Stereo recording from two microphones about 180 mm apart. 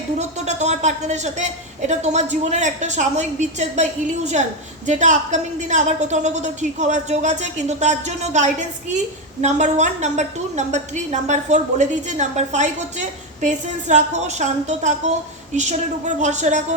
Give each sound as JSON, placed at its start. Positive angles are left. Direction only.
{"t": 0.2, "sound": "a woman's voice", "side_deg": -40}